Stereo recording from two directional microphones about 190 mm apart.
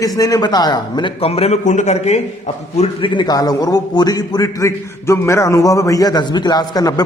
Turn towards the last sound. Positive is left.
turn(degrees=20)  # may be behind; listen again after turning